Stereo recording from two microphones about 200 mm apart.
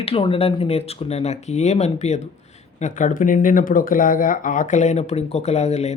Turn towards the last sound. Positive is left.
turn(degrees=35)  # may be behind; listen again after turning